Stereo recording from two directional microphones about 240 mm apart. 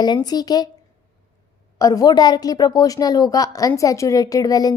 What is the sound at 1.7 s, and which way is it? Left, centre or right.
A woman's voice, centre.